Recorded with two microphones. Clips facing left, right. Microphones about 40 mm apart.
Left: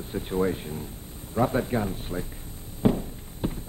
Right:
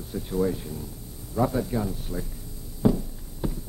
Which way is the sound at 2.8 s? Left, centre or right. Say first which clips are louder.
Even; left.